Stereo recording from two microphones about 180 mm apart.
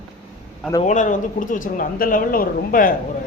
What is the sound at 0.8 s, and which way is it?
A woman's voice, 45° left (ahead or behind).